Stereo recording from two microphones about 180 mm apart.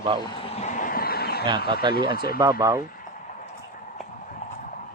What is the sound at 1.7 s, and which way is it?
Speech, 25° right (ahead or behind).